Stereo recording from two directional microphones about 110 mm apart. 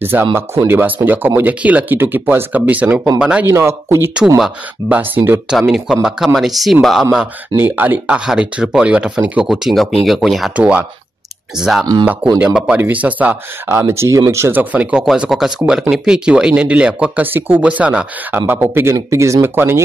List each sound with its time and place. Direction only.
0.0 s speech: 20° right (ahead or behind)
3.4 s speech: 25° right (ahead or behind)
4.8 s speech: 15° right (ahead or behind)
5.5 s speech: 5° right (ahead or behind)
7.5 s speech: 20° right (ahead or behind); by 10.5 s centre (ahead or behind)
10.5 s speech: 10° right (ahead or behind)
12.4 s speech: 15° right (ahead or behind)